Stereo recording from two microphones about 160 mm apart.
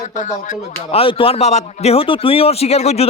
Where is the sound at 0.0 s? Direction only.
50° left (ahead or behind).